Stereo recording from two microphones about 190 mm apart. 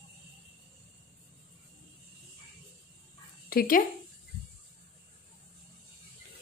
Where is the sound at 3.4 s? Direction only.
50° left (ahead or behind).